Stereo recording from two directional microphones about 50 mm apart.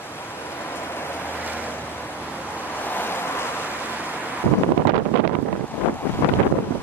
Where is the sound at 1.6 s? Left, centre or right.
Left.